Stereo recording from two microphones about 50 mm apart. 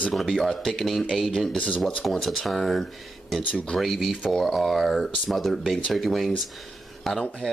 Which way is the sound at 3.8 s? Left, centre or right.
Centre.